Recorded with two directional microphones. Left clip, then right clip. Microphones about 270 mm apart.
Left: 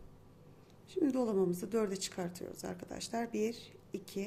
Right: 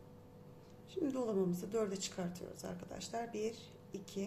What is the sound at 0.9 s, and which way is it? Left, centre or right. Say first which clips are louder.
A woman's voice: left 4 dB; left.